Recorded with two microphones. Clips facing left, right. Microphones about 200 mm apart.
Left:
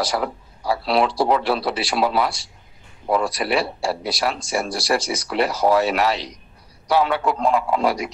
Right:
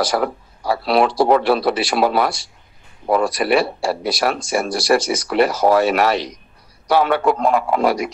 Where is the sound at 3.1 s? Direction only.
50° right (ahead or behind).